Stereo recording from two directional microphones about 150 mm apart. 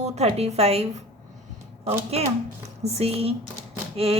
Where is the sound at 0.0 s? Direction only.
45° right (ahead or behind).